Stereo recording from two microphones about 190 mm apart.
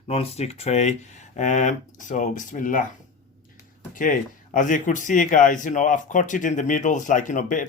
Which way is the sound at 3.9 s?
45° left (ahead or behind).